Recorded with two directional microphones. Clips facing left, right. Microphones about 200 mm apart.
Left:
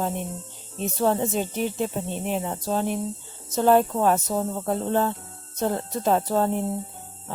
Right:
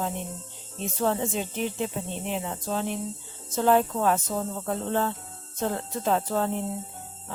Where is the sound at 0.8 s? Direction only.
40° left (ahead or behind).